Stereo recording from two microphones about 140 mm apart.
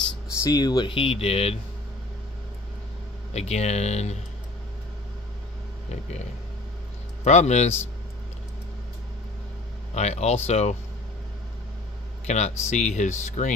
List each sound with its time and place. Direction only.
0.4 s speech: 30° left (ahead or behind); by 1.6 s 45° left (ahead or behind)
3.3 s speech: 50° left (ahead or behind)
5.9 s speech: 50° left (ahead or behind)
7.2 s speech: 55° left (ahead or behind)
9.9 s speech: 50° left (ahead or behind)
12.3 s speech: 55° left (ahead or behind)